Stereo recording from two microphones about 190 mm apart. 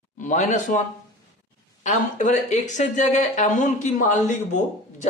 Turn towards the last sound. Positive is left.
turn(degrees=40)  # may be behind; listen again after turning